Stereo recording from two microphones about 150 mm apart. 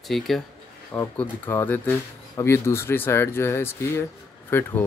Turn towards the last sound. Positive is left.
turn(degrees=15)  # may be behind; listen again after turning